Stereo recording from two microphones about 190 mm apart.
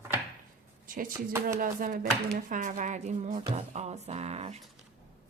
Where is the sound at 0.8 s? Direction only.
45° right (ahead or behind).